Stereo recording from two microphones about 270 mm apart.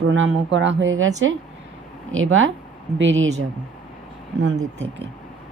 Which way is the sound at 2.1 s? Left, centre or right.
Right.